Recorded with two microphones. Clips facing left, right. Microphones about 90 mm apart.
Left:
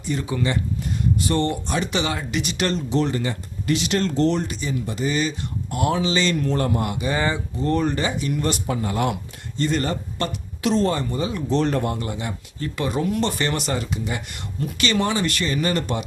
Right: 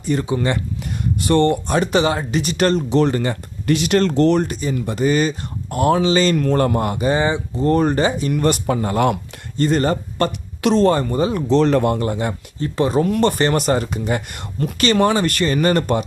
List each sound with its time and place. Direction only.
0.0 s speech: 50° right (ahead or behind)
1.2 s speech: 60° right (ahead or behind); by 2.8 s 45° right (ahead or behind)
2.9 s speech: 65° right (ahead or behind)
3.2 s speech: 50° right (ahead or behind)
7.2 s speech: 20° right (ahead or behind)
7.5 s speech: 40° right (ahead or behind)
8.3 s speech: 55° right (ahead or behind)
10.6 s speech: 65° right (ahead or behind)
10.9 s speech: 45° right (ahead or behind)
11.4 s speech: 90° right
11.9 s speech: 50° right (ahead or behind)
12.5 s speech: 30° right (ahead or behind)
13.1 s speech: 55° right (ahead or behind)